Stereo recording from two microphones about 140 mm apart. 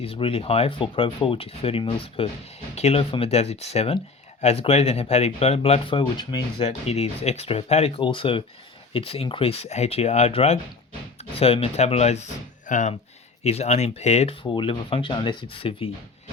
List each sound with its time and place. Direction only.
0.0 s speech: 40° left (ahead or behind)
6.6 s speech: 50° left (ahead or behind)
12.6 s speech: 60° left (ahead or behind)
13.4 s speech: 50° left (ahead or behind)
14.5 s speech: 35° left (ahead or behind)